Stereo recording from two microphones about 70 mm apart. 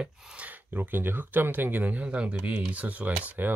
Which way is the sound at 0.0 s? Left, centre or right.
Centre.